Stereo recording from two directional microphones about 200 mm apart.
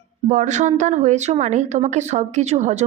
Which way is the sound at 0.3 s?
40° right (ahead or behind).